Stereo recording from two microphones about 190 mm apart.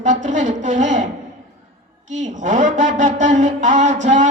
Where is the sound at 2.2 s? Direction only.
40° right (ahead or behind).